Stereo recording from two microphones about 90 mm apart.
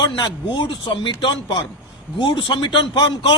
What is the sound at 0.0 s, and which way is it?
A man's voice, 55° left (ahead or behind).